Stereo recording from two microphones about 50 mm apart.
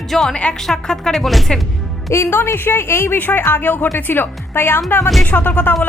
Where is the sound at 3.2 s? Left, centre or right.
Left.